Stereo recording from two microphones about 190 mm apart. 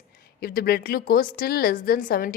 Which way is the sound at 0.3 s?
55° left (ahead or behind).